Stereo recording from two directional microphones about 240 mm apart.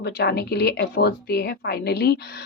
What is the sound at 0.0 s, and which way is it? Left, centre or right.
A woman's voice, left.